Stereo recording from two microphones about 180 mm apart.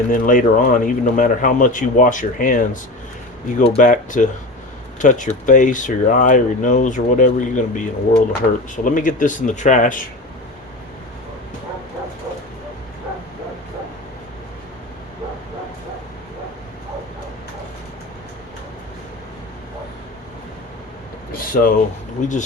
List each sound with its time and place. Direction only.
0.1 s speech: 50° left (ahead or behind)
3.7 s speech: 45° left (ahead or behind)
21.3 s a sound: 50° left (ahead or behind)
22.2 s speech: 45° left (ahead or behind)